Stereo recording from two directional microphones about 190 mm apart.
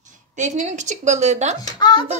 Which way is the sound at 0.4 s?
40° right (ahead or behind).